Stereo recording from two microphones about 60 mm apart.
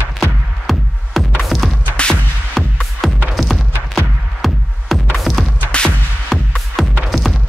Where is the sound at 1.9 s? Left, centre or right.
Centre.